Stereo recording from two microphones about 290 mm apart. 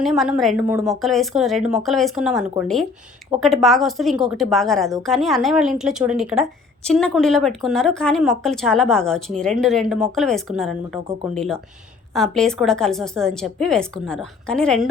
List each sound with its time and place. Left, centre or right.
0.0 s a woman's voice: centre